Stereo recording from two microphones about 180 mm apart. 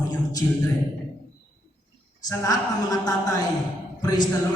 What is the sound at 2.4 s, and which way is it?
A woman's voice, 20° left (ahead or behind).